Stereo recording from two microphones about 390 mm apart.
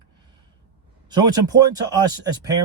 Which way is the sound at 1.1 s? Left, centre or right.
Centre.